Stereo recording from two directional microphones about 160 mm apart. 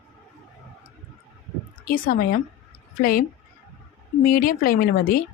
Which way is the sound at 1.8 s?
65° left (ahead or behind).